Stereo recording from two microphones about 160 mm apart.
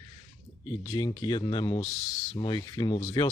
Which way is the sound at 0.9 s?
25° left (ahead or behind).